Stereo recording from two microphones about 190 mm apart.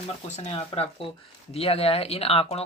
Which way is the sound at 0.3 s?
35° left (ahead or behind).